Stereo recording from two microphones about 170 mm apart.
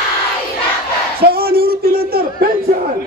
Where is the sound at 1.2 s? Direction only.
65° right (ahead or behind).